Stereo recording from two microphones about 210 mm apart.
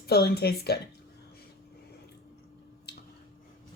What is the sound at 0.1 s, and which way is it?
Speech, 50° left (ahead or behind).